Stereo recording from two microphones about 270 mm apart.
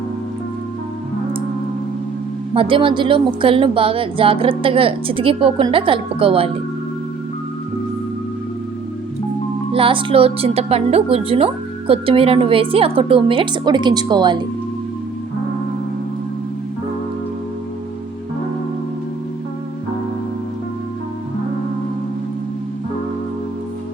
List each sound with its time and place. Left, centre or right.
2.5 s a woman's voice: centre
9.7 s a woman's voice: centre